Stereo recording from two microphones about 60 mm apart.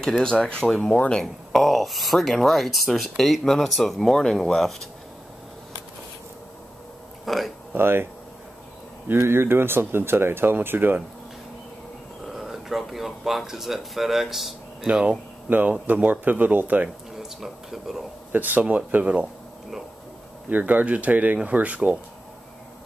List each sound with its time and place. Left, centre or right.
0.0 s speech: centre
1.2 s speech: centre
7.2 s a sound: centre
7.7 s speech: right
9.2 s speech: right
12.4 s speech: centre
15.5 s speech: right
17.1 s speech: centre
18.3 s speech: right
20.4 s speech: right